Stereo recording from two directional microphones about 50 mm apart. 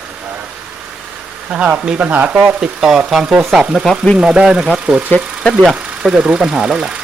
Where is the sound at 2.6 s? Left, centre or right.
Centre.